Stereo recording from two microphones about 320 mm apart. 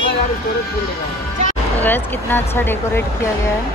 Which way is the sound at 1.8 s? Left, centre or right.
Centre.